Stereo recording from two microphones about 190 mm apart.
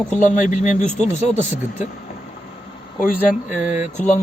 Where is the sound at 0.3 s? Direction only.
40° left (ahead or behind).